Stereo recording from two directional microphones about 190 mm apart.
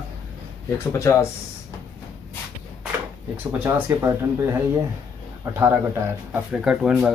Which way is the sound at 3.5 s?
10° right (ahead or behind).